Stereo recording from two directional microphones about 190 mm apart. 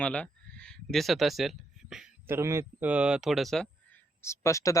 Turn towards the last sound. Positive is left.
turn(degrees=15)  # may be behind; listen again after turning